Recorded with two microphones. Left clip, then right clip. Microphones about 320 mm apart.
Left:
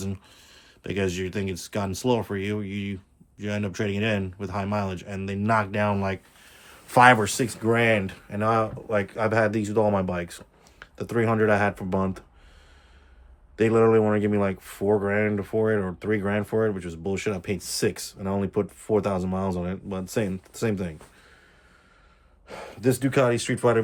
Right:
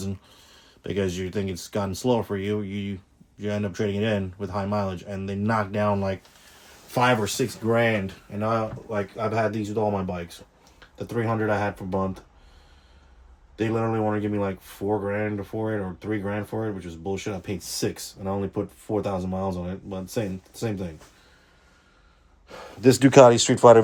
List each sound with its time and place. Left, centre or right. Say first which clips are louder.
0.0 s speech: even; centre
13.6 s speech: left 6 dB; centre
22.8 s speech: right 6 dB; right
23.1 s speech: right 12 dB; centre